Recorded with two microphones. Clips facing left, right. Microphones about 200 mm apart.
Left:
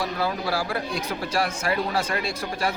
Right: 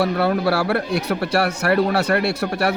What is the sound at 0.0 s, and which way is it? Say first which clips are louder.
Speech: right 8 dB; 65° right (ahead or behind).